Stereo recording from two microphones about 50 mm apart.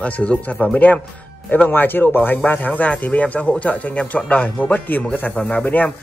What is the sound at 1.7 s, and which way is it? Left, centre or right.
Speech, left.